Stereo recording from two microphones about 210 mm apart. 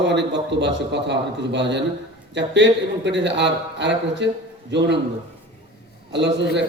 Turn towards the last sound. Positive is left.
turn(degrees=-55)  # may be behind; listen again after turning